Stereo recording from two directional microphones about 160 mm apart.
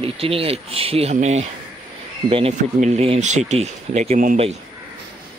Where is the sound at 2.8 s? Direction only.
45° right (ahead or behind).